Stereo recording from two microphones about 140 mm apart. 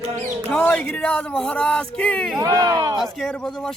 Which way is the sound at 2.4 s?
25° right (ahead or behind).